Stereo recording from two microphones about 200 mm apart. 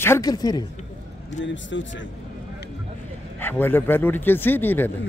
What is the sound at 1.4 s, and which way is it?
Speech, 65° left (ahead or behind).